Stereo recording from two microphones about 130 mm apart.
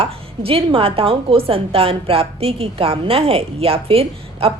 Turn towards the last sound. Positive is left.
turn(degrees=-45)  # may be behind; listen again after turning